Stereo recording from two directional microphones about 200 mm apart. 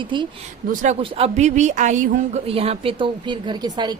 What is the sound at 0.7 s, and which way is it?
A woman's voice, 40° right (ahead or behind).